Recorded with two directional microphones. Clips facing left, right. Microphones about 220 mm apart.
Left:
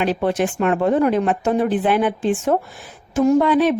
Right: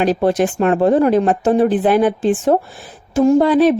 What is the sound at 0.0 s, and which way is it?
Speech, 40° right (ahead or behind).